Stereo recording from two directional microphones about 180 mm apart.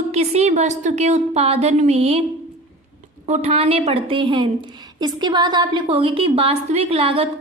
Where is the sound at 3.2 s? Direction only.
35° right (ahead or behind).